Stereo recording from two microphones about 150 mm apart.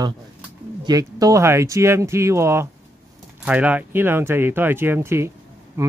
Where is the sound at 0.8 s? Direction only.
25° right (ahead or behind).